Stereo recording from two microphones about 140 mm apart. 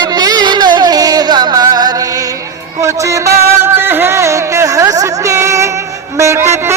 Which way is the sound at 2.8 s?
20° right (ahead or behind).